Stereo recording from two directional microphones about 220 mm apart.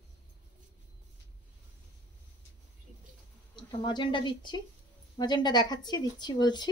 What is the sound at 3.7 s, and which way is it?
Speech, 20° left (ahead or behind).